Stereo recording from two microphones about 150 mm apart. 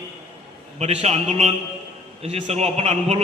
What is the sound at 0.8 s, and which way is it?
Speech, 45° right (ahead or behind).